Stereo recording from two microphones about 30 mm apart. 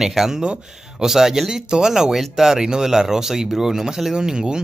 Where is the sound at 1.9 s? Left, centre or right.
Centre.